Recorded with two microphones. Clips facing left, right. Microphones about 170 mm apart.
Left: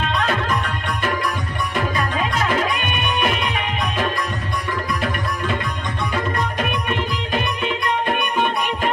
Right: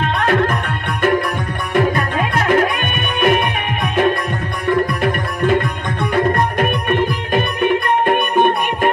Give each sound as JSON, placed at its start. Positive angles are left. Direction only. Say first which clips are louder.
{"t": 0.0, "sound": "music", "louder": "right 6 dB", "side_deg": -60}
{"t": 2.3, "sound": "music", "louder": "right 8 dB", "side_deg": -55}
{"t": 6.1, "sound": "music", "louder": "right 9 dB", "side_deg": -55}